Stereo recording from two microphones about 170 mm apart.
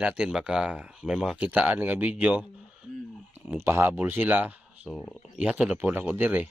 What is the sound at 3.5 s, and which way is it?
Speech, 15° right (ahead or behind).